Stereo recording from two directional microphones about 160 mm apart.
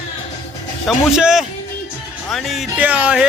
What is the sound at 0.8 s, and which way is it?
Speech, centre (ahead or behind).